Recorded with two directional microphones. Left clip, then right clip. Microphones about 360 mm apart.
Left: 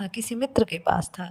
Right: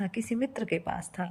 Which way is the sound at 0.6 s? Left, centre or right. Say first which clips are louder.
Left 9 dB; left.